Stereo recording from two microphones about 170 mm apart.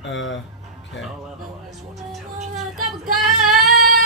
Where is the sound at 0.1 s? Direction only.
90° left.